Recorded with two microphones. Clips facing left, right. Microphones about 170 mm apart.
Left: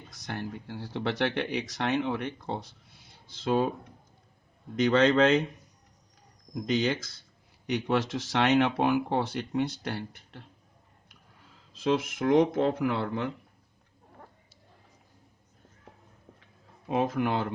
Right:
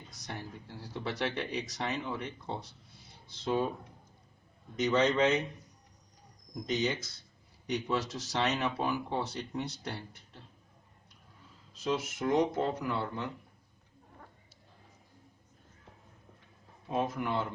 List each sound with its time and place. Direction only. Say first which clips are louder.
0.1 s speech: left 7 dB; 85° left
3.2 s speech: left 5 dB; 90° left
4.8 s speech: left 5 dB; 90° left
6.5 s speech: left 5 dB; 85° left
7.7 s speech: left 5 dB; 90° left
11.8 s speech: left 6 dB; 80° left
16.9 s speech: left 5 dB; 75° left (ahead or behind)